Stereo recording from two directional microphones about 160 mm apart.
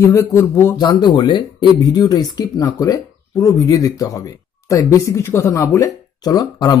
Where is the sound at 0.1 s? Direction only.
20° left (ahead or behind).